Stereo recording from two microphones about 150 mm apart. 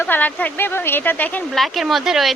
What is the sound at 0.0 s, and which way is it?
A woman's voice, 10° left (ahead or behind).